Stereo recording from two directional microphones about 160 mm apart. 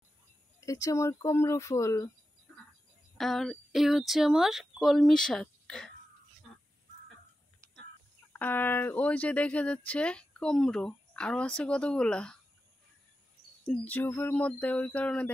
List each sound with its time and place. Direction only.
0.7 s speech: 20° left (ahead or behind)
3.2 s speech: centre (ahead or behind)
8.3 s speech: 10° left (ahead or behind)
13.7 s speech: 10° left (ahead or behind)